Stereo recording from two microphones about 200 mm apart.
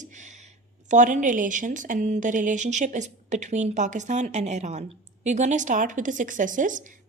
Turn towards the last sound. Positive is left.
turn(degrees=-40)  # may be behind; listen again after turning